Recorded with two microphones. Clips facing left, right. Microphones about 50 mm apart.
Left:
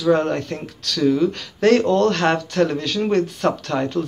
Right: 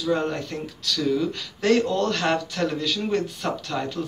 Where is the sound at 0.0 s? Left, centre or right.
Left.